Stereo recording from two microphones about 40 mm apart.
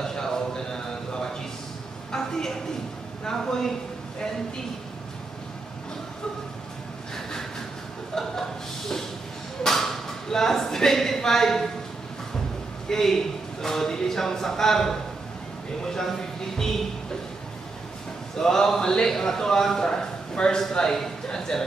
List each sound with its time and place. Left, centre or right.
0.0 s a sound: centre
3.3 s a man's voice: centre
8.1 s a sound: centre
9.6 s speech: centre
12.9 s a man's voice: centre
18.4 s a man's voice: centre